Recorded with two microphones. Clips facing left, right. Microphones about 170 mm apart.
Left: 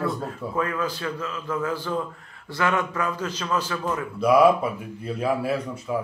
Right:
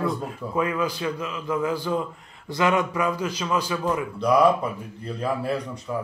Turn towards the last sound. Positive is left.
turn(degrees=5)  # may be behind; listen again after turning